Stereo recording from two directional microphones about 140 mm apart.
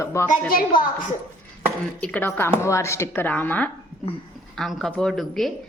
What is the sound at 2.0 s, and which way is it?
A woman's voice, 10° left (ahead or behind).